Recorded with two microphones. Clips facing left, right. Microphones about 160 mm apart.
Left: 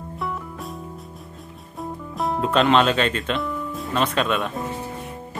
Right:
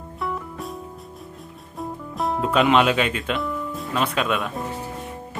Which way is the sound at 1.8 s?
Centre (ahead or behind).